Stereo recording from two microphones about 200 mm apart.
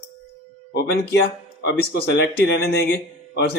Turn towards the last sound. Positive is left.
turn(degrees=55)  # may be behind; listen again after turning